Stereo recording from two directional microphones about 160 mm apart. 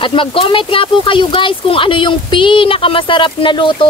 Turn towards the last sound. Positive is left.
turn(degrees=30)  # may be behind; listen again after turning